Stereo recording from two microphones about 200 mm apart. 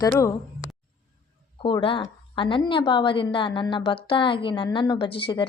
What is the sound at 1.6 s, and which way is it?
A woman's voice, 25° left (ahead or behind).